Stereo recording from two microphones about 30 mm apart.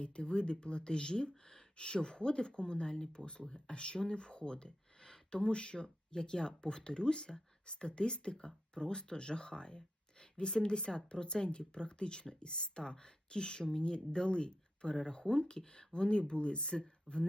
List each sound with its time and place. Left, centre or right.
0.0 s speech: left